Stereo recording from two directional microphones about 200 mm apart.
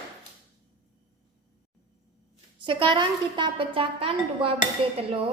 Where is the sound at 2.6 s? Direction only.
25° right (ahead or behind).